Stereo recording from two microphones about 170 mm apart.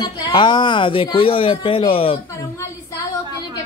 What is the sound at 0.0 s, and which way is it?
Speech, 25° left (ahead or behind).